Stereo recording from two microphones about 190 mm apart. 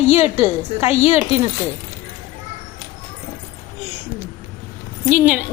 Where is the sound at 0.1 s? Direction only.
35° left (ahead or behind).